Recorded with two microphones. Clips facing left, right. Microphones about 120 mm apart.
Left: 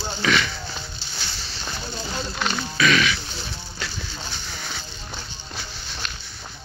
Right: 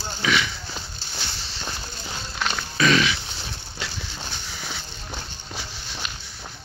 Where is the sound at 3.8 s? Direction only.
20° right (ahead or behind).